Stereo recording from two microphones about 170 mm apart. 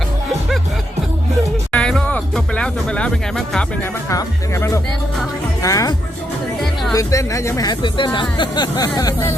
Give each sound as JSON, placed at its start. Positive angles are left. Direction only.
{"t": 1.7, "sound": "music", "side_deg": 5}
{"t": 4.1, "sound": "speech", "side_deg": 15}
{"t": 6.9, "sound": "speech", "side_deg": 20}